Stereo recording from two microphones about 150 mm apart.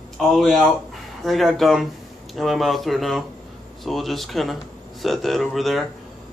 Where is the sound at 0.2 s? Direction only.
Centre (ahead or behind).